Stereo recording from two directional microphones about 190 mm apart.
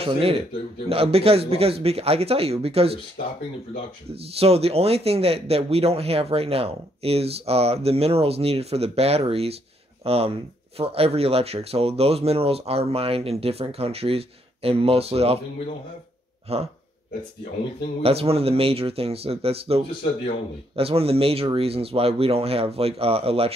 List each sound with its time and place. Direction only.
0.0 s speech: 30° right (ahead or behind)
4.1 s speech: 30° right (ahead or behind)
16.5 s speech: 30° right (ahead or behind)
18.0 s speech: 30° right (ahead or behind)